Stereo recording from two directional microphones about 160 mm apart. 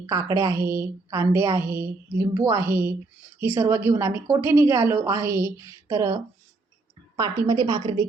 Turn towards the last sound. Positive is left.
turn(degrees=-25)  # may be behind; listen again after turning